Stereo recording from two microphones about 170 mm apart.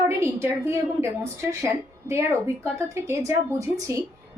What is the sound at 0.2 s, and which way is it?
A woman's voice, 15° right (ahead or behind).